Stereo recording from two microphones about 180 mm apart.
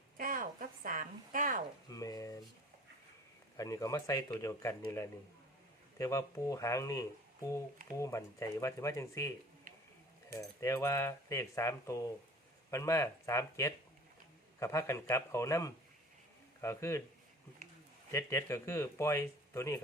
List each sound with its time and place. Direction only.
0.2 s a woman's voice: 50° right (ahead or behind)
1.9 s speech: 20° left (ahead or behind)
3.6 s speech: 20° left (ahead or behind)
10.3 s a man's voice: 15° left (ahead or behind)
18.1 s speech: 15° left (ahead or behind)